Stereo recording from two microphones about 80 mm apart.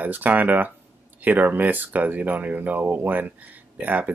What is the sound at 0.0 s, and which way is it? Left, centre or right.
Speech, right.